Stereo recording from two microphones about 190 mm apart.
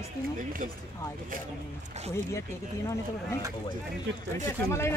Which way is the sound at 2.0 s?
35° right (ahead or behind).